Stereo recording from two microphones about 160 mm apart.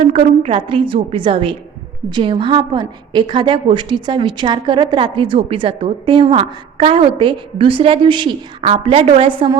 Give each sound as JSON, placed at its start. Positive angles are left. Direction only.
{"t": 0.1, "sound": "a woman's voice", "side_deg": -35}